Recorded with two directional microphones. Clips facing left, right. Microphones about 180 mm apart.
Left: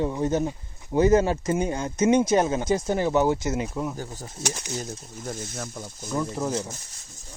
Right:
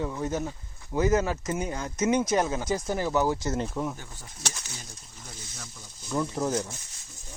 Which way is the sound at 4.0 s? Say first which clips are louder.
Left 10 dB; 40° left (ahead or behind).